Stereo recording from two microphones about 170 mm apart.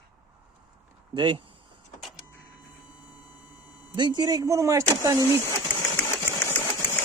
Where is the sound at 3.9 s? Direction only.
25° right (ahead or behind).